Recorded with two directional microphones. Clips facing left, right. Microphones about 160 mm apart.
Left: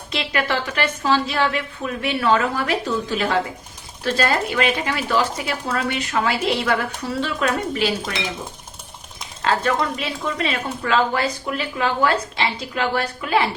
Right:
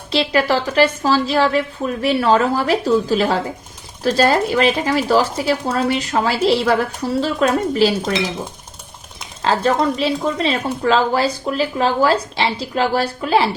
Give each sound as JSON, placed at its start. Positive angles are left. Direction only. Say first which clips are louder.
{"t": 0.1, "sound": "speech", "louder": "right 7 dB", "side_deg": -35}
{"t": 9.4, "sound": "speech", "louder": "right 4 dB", "side_deg": -30}